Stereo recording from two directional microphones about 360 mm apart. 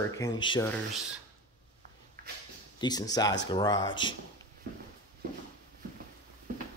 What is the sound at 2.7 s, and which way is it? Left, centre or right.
Speech, centre.